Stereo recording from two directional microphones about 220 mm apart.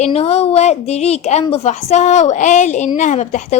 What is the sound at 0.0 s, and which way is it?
A woman's voice, 30° left (ahead or behind).